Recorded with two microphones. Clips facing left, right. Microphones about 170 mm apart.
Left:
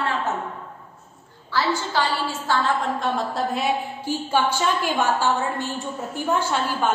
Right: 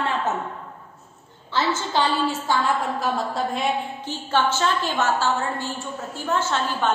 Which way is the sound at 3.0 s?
Centre (ahead or behind).